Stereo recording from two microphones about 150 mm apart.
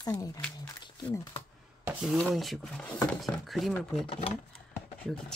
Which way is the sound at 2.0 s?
Centre (ahead or behind).